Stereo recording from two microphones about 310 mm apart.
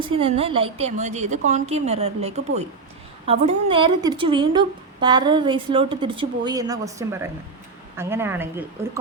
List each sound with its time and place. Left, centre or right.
0.0 s a woman's voice: centre